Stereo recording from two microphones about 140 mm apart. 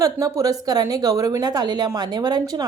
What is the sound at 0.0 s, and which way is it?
A woman's voice, 25° right (ahead or behind).